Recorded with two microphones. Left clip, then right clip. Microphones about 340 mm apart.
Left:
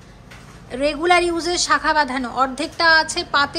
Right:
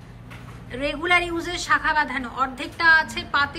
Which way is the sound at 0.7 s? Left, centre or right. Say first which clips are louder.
Left 5 dB; centre.